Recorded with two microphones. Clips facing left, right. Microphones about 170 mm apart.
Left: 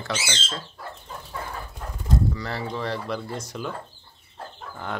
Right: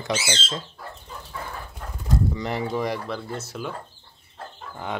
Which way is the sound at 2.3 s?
20° right (ahead or behind).